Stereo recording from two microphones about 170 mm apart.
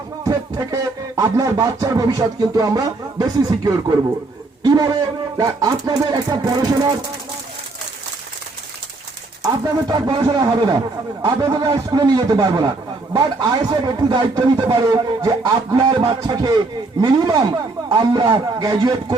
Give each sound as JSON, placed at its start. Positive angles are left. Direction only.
{"t": 0.3, "sound": "music", "side_deg": -20}
{"t": 9.4, "sound": "music", "side_deg": -20}